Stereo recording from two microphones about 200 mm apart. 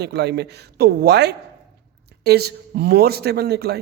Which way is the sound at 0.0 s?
55° right (ahead or behind).